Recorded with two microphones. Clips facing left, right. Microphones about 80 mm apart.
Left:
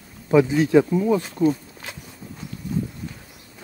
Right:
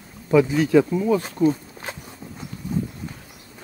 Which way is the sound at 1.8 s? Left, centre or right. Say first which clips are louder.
Right 4 dB; right.